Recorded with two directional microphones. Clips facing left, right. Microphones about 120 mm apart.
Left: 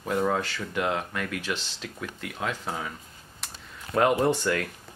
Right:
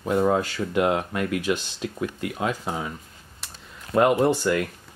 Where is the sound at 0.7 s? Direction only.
20° right (ahead or behind).